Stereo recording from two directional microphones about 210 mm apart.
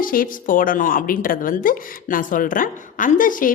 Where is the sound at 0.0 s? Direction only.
40° left (ahead or behind).